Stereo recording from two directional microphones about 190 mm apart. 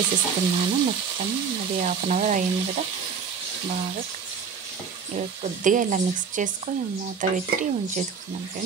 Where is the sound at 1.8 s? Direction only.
40° right (ahead or behind).